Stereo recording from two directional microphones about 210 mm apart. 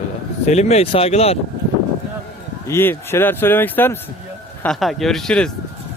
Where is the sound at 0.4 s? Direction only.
30° left (ahead or behind).